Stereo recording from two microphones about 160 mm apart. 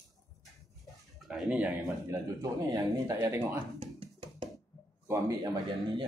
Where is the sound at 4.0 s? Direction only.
35° right (ahead or behind).